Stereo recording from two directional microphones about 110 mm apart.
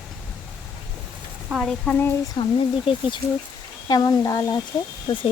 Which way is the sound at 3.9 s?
35° left (ahead or behind).